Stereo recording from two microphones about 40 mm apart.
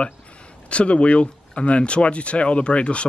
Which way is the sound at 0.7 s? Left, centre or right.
Left.